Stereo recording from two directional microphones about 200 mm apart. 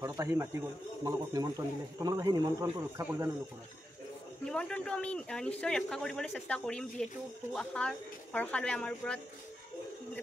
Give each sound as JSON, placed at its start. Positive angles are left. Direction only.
{"t": 0.2, "sound": "speech", "side_deg": -15}
{"t": 4.5, "sound": "a man's voice", "side_deg": 5}